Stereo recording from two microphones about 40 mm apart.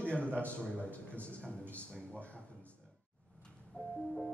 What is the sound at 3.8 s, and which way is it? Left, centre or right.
Music, left.